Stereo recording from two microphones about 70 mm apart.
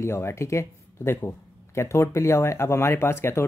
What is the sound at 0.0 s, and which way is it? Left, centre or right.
Speech, left.